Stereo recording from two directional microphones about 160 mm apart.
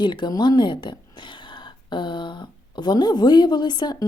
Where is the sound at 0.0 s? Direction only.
30° left (ahead or behind).